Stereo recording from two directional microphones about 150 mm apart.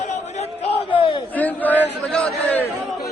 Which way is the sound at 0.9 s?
35° left (ahead or behind).